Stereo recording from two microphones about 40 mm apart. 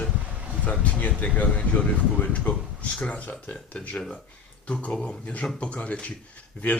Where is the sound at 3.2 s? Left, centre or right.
Left.